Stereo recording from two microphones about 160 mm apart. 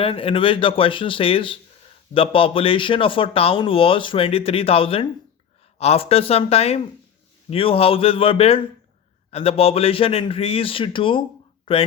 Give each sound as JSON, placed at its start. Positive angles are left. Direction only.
{"t": 0.0, "sound": "speech", "side_deg": 35}